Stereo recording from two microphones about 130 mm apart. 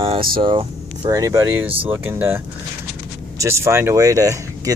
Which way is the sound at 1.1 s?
25° right (ahead or behind).